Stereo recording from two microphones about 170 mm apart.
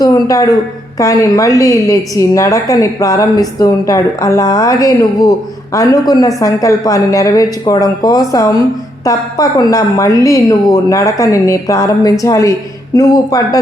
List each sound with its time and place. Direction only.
0.0 s a woman's voice: 20° left (ahead or behind)